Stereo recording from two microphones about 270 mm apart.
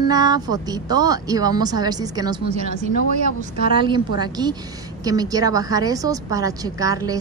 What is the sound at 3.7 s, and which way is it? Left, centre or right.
A woman's voice, centre.